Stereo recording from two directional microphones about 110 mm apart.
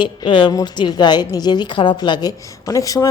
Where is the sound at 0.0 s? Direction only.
50° left (ahead or behind).